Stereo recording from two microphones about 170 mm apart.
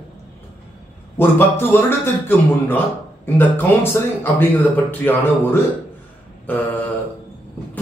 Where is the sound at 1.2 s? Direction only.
10° left (ahead or behind).